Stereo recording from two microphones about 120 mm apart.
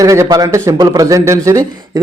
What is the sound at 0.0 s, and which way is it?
A man's voice, 30° right (ahead or behind).